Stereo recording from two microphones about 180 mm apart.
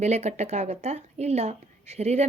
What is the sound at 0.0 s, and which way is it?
A woman's voice, 40° right (ahead or behind).